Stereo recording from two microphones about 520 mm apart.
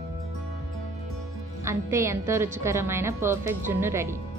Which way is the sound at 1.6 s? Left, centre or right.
Centre.